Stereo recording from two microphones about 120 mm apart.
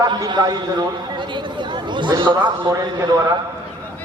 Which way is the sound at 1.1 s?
40° right (ahead or behind).